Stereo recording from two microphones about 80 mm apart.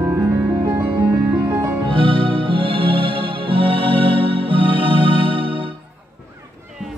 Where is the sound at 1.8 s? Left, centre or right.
Right.